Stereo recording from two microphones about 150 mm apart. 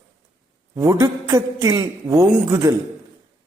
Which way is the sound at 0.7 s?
20° right (ahead or behind).